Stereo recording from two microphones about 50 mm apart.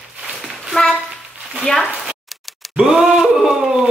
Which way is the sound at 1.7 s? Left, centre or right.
Centre.